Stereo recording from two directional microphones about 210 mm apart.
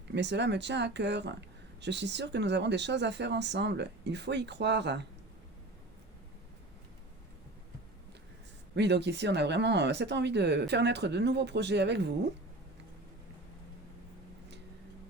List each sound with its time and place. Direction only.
0.1 s speech: 55° right (ahead or behind)
8.7 s speech: 55° right (ahead or behind)